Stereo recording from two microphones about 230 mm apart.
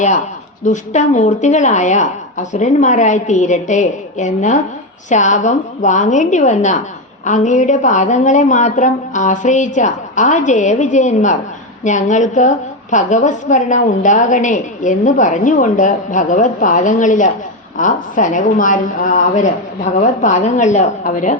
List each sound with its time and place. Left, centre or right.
0.6 s a woman's voice: left